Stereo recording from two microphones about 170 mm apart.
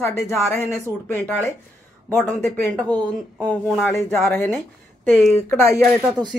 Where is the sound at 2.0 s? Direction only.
10° left (ahead or behind).